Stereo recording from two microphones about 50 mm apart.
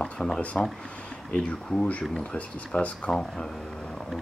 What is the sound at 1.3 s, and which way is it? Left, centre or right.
Speech, left.